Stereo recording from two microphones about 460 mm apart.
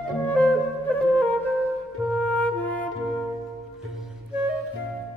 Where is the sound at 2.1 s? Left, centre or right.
Centre.